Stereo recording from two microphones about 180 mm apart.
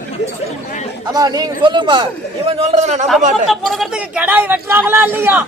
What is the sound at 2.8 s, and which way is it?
Speech, 40° right (ahead or behind).